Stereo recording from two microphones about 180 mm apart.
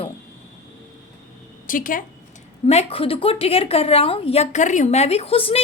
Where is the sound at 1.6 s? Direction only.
50° left (ahead or behind).